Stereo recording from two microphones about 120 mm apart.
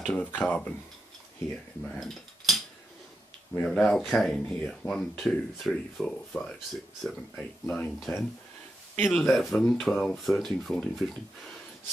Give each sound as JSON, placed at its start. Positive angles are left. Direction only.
{"t": 0.0, "sound": "speech", "side_deg": 10}
{"t": 1.9, "sound": "a sound", "side_deg": 5}
{"t": 3.5, "sound": "speech", "side_deg": 10}
{"t": 8.9, "sound": "speech", "side_deg": 15}
{"t": 9.2, "sound": "speech", "side_deg": 5}